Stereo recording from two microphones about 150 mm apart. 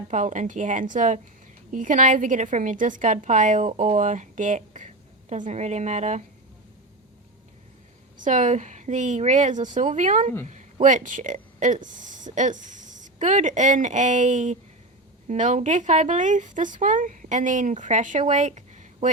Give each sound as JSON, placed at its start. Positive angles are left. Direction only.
{"t": 0.1, "sound": "a woman's voice", "side_deg": -55}
{"t": 8.2, "sound": "a woman's voice", "side_deg": -55}